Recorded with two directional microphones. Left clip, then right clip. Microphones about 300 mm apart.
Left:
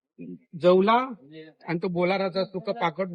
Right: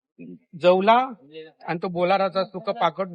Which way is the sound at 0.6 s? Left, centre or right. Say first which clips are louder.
Right 3 dB; centre.